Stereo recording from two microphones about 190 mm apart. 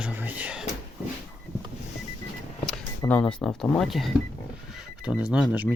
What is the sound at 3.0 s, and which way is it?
Speech, 5° left (ahead or behind).